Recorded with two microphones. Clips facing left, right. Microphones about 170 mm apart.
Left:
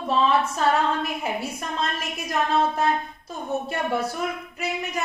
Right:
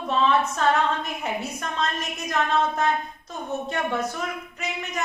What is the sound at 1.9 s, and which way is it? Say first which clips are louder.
A woman's voice: even; 10° left (ahead or behind).